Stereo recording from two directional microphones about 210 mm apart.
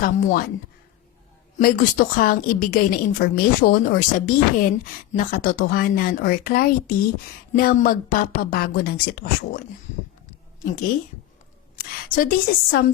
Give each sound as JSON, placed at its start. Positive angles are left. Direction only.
{"t": 0.0, "sound": "a woman's voice", "side_deg": 45}
{"t": 1.5, "sound": "a woman's voice", "side_deg": 40}
{"t": 11.8, "sound": "a woman's voice", "side_deg": 45}